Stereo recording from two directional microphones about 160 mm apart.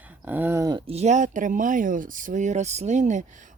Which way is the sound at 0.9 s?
45° right (ahead or behind).